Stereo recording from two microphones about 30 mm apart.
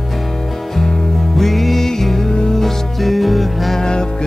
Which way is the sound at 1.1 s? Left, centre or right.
Centre.